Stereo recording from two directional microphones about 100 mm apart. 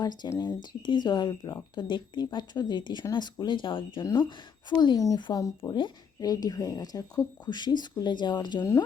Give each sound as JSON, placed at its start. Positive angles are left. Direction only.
{"t": 0.0, "sound": "speech", "side_deg": 45}
{"t": 4.9, "sound": "speech", "side_deg": 35}